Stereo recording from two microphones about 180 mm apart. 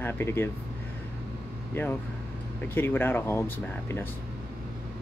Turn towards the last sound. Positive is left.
turn(degrees=10)  # may be behind; listen again after turning